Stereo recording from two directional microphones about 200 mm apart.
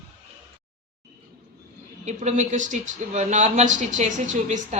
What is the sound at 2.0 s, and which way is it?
Speech, 35° right (ahead or behind).